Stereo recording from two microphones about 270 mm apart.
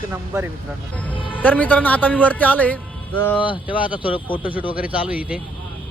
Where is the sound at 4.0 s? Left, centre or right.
Centre.